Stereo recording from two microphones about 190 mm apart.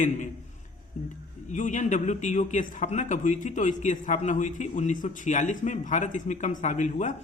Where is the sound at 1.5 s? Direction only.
40° left (ahead or behind).